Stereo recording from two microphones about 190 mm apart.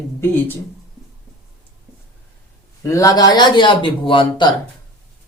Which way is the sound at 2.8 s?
15° left (ahead or behind).